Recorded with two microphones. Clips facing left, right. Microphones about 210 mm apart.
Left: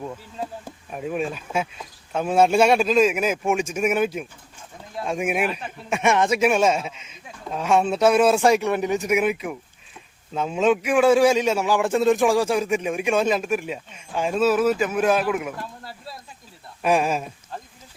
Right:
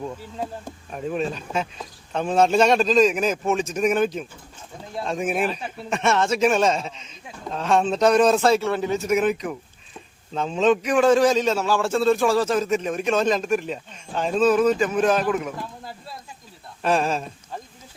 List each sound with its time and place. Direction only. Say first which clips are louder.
0.9 s a man's voice: even; 5° left (ahead or behind)
16.8 s a man's voice: left 1 dB; 10° left (ahead or behind)